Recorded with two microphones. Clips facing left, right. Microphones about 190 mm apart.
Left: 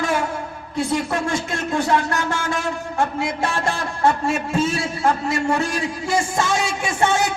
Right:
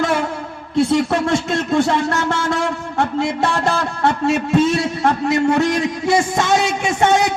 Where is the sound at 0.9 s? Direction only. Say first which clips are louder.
Right 3 dB; 75° right (ahead or behind).